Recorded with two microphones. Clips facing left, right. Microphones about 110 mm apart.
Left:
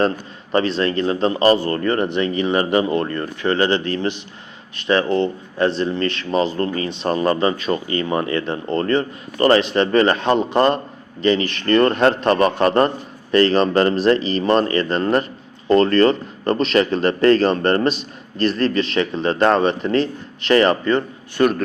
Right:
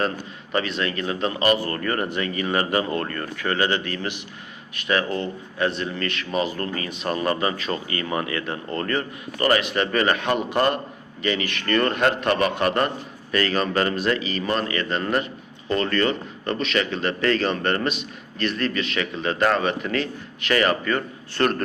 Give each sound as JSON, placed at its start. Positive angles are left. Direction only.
{"t": 0.5, "sound": "speech", "side_deg": 30}
{"t": 21.3, "sound": "a man's voice", "side_deg": 10}